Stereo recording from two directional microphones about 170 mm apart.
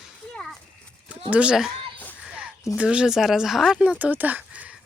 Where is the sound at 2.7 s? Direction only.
5° right (ahead or behind).